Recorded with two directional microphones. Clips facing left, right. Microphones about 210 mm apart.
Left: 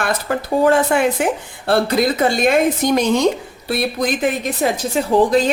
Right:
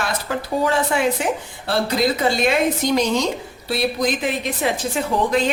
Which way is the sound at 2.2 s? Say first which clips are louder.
Left 3 dB; 50° left (ahead or behind).